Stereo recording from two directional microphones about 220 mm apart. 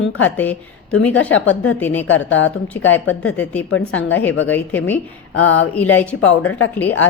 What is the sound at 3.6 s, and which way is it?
Speech, 65° left (ahead or behind).